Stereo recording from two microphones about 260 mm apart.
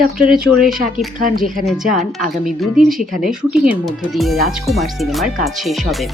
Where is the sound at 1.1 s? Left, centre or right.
Right.